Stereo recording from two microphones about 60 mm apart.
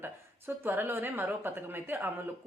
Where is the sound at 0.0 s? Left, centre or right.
Right.